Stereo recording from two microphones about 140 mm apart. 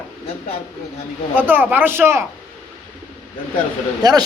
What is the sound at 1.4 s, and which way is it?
Speech, 15° right (ahead or behind).